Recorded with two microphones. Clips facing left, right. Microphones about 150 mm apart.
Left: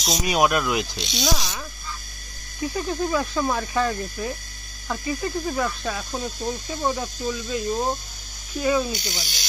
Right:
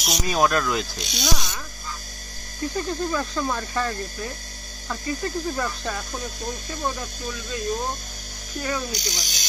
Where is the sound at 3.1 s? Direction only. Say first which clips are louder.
Left 2 dB; 10° left (ahead or behind).